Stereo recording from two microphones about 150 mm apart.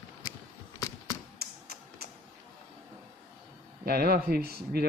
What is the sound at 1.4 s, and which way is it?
Tap, 90° right.